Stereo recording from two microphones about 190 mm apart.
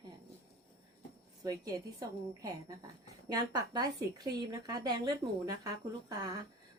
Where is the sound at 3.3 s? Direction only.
20° right (ahead or behind).